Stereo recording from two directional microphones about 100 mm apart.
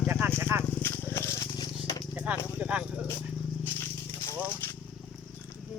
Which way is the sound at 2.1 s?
15° right (ahead or behind).